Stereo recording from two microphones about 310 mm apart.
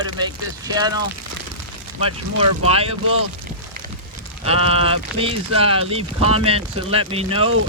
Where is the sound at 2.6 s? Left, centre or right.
Centre.